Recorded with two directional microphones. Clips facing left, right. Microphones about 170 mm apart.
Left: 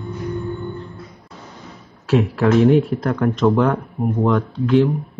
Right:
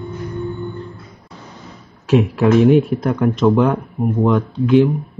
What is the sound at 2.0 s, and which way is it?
Speech, 15° right (ahead or behind).